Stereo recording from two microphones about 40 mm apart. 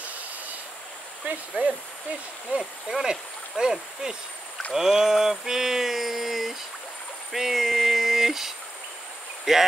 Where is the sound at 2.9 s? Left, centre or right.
Centre.